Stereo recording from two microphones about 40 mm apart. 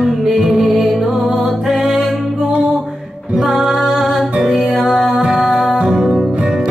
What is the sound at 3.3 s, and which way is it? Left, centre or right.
Music, centre.